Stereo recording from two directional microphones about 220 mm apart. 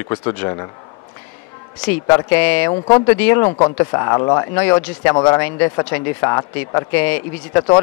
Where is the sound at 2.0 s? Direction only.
15° left (ahead or behind).